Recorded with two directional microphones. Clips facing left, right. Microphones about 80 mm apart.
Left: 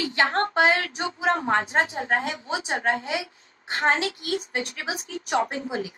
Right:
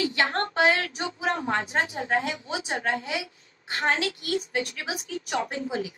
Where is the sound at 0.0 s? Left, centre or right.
Left.